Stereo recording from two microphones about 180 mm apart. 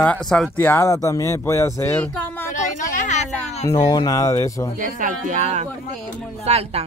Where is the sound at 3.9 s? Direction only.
20° left (ahead or behind).